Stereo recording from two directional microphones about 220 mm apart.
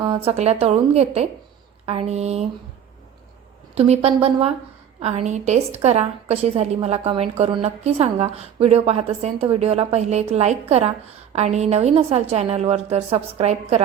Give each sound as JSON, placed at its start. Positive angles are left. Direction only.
{"t": 0.0, "sound": "a woman's voice", "side_deg": -25}
{"t": 3.8, "sound": "a woman's voice", "side_deg": -30}